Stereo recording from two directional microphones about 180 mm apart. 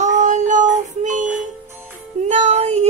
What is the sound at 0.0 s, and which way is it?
Music, 40° right (ahead or behind).